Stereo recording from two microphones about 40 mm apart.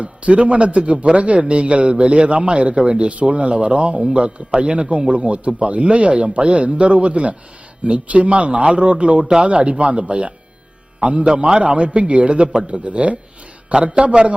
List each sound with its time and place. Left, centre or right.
0.0 s a man's voice: right